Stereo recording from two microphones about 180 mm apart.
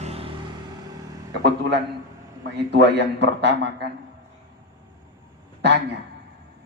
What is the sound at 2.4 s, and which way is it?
Speech, 70° right (ahead or behind).